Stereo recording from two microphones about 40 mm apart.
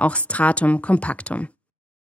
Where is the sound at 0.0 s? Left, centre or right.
Left.